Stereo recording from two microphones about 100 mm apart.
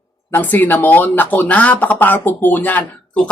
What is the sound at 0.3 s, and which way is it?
Speech, 20° left (ahead or behind).